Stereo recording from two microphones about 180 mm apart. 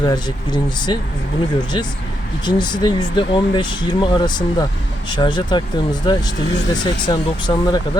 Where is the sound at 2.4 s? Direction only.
25° left (ahead or behind).